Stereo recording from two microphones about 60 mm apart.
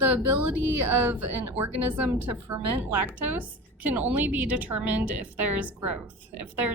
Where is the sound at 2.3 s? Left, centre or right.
Right.